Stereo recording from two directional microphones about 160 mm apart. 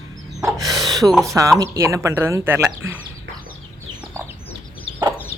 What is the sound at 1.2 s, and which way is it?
Speech, 20° right (ahead or behind).